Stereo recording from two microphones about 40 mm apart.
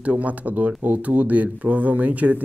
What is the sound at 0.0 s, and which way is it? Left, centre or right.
Speech, right.